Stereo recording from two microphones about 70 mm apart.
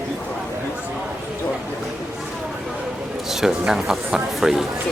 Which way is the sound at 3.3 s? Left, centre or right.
Centre.